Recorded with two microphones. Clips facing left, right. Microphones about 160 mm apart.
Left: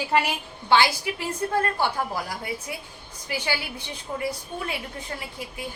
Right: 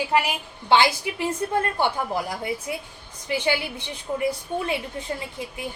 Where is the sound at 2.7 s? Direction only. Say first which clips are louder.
Right 4 dB; 20° right (ahead or behind).